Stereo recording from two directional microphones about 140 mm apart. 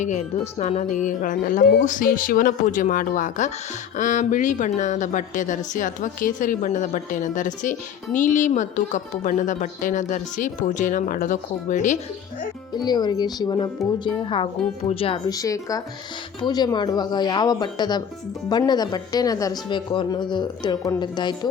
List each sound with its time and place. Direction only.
0.0 s a woman's voice: 55° left (ahead or behind)
12.7 s speech: 30° left (ahead or behind)
15.3 s speech: 25° left (ahead or behind)